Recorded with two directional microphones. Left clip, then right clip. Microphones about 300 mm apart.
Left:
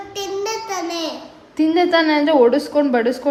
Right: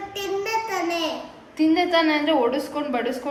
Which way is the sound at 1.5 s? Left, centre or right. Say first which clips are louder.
Left 4 dB; left.